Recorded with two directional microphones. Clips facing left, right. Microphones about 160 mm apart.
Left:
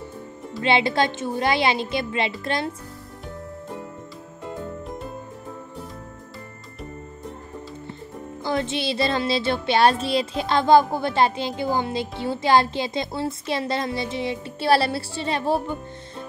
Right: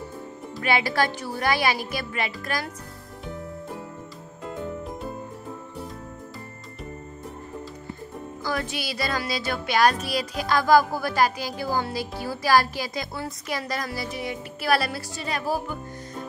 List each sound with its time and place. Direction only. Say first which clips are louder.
0.6 s child singing: left 3 dB; 25° left (ahead or behind)
8.5 s child singing: left 5 dB; 25° left (ahead or behind)